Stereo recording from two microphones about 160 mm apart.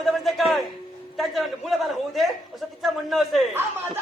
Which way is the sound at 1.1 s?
Centre (ahead or behind).